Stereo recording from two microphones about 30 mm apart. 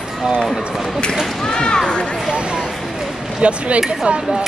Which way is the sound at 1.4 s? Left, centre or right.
Left.